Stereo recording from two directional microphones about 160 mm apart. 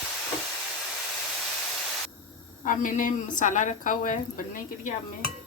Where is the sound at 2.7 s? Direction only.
55° left (ahead or behind).